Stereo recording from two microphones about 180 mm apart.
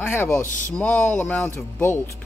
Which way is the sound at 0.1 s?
15° left (ahead or behind).